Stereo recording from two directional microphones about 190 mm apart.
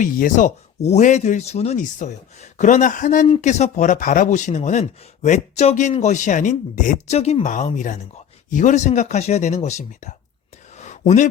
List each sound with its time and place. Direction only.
0.0 s speech: 45° left (ahead or behind)
3.2 s speech: 35° left (ahead or behind)
10.8 s a sound: 35° left (ahead or behind)